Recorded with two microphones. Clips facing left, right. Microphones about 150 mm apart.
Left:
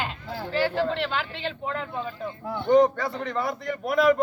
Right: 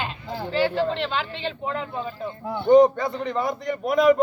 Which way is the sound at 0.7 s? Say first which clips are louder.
Right 2 dB; 20° right (ahead or behind).